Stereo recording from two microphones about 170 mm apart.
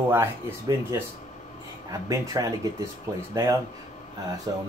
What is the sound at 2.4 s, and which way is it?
Speech, 20° right (ahead or behind).